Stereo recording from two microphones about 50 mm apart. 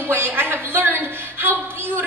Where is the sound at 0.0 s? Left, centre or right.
Right.